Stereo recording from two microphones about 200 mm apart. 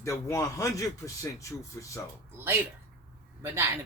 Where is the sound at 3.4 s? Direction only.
15° right (ahead or behind).